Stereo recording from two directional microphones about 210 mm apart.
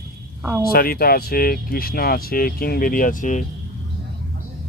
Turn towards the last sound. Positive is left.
turn(degrees=35)  # may be behind; listen again after turning